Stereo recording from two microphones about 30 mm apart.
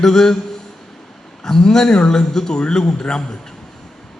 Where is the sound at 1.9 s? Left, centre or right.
Left.